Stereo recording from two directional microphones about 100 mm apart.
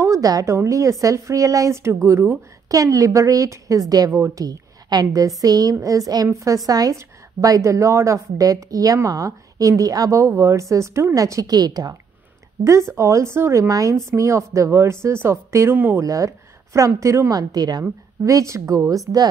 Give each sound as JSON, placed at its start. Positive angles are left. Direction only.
{"t": 0.0, "sound": "a woman's voice", "side_deg": -35}
{"t": 12.6, "sound": "speech", "side_deg": -30}
{"t": 16.0, "sound": "a woman's voice", "side_deg": -30}
{"t": 18.2, "sound": "a woman's voice", "side_deg": -30}